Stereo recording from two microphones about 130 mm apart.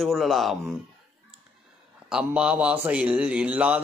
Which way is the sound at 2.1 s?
10° right (ahead or behind).